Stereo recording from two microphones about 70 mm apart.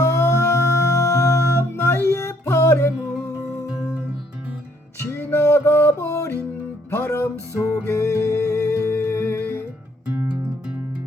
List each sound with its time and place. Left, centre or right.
0.0 s music: left
4.9 s music: left